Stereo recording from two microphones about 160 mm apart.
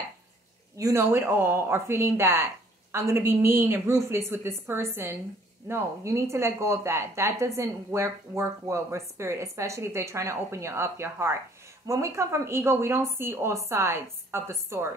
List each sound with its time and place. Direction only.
0.7 s a woman's voice: 20° right (ahead or behind)